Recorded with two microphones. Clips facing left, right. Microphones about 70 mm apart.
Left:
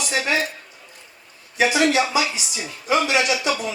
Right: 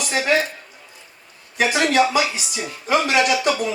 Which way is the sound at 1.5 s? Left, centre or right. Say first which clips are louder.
Right 1 dB; right.